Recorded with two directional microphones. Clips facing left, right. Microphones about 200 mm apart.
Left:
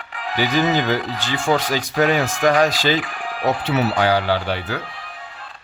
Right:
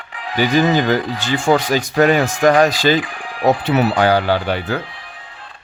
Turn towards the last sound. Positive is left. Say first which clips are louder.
# right 3 dB
turn(degrees=-50)  # may be behind; listen again after turning